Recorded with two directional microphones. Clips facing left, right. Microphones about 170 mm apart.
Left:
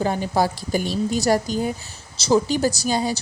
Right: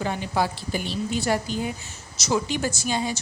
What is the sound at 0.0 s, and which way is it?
A woman's voice, 40° left (ahead or behind).